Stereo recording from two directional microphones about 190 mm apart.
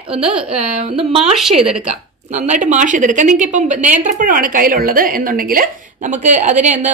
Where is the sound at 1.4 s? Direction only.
5° right (ahead or behind).